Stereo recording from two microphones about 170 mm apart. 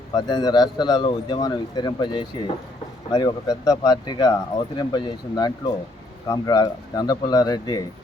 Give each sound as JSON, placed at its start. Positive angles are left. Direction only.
{"t": 0.1, "sound": "speech", "side_deg": 25}